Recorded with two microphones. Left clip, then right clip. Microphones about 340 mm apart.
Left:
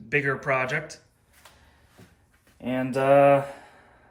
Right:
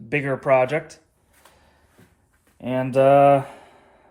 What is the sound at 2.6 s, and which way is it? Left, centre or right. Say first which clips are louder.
Mantra: right 5 dB; right.